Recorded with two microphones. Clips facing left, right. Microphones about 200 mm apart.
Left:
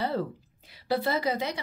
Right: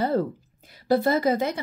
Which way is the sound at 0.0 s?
45° right (ahead or behind).